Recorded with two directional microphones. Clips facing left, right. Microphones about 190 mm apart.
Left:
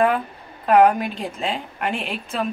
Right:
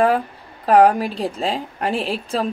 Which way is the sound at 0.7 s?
35° right (ahead or behind).